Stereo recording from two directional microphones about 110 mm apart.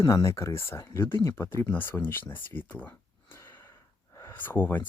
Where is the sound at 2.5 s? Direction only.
15° left (ahead or behind).